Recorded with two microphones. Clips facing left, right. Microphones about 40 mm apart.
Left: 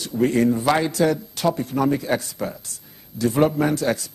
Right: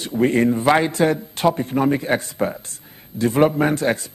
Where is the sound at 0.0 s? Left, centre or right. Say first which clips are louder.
Right 2 dB; right.